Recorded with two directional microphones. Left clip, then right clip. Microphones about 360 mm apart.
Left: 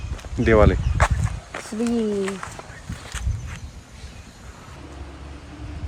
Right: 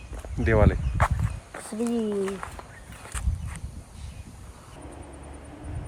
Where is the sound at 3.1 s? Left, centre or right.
Centre.